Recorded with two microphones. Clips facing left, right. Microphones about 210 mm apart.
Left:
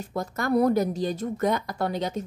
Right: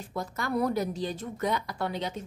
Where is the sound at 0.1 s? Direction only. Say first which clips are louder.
Left 6 dB; 45° left (ahead or behind).